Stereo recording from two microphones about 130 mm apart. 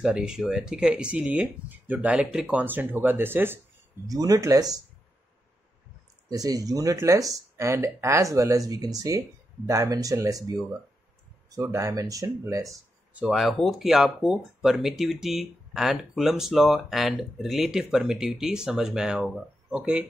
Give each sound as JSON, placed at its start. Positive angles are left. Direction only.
{"t": 0.0, "sound": "speech", "side_deg": -5}
{"t": 4.1, "sound": "speech", "side_deg": -25}
{"t": 6.2, "sound": "speech", "side_deg": -30}
{"t": 13.1, "sound": "speech", "side_deg": -5}